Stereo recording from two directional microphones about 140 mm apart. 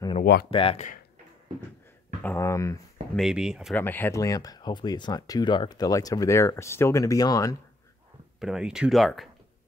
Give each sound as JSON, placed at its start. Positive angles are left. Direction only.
{"t": 0.5, "sound": "speech", "side_deg": 45}
{"t": 2.2, "sound": "speech", "side_deg": 20}
{"t": 3.2, "sound": "speech", "side_deg": -5}
{"t": 3.7, "sound": "speech", "side_deg": 15}
{"t": 4.2, "sound": "speech", "side_deg": 25}
{"t": 8.4, "sound": "speech", "side_deg": -5}